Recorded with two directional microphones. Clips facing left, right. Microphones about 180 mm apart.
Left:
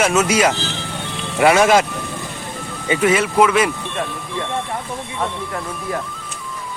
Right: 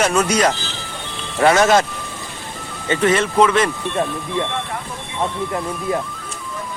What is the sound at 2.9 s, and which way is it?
Speech, 10° left (ahead or behind).